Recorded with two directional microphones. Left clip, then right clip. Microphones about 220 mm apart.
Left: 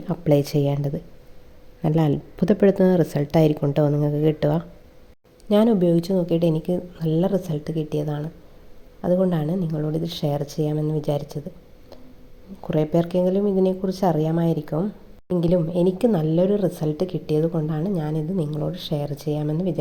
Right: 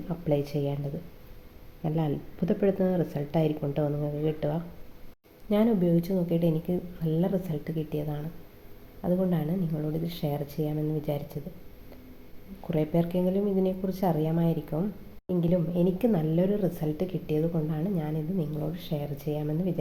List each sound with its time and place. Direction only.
0.1 s speech: 45° left (ahead or behind)
12.6 s speech: 45° left (ahead or behind)